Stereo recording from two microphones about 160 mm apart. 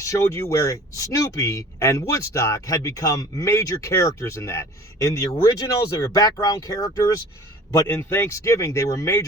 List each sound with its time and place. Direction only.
0.0 s speech: 20° left (ahead or behind)